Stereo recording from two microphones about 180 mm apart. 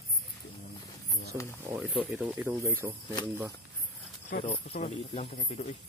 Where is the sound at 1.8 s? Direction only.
5° left (ahead or behind).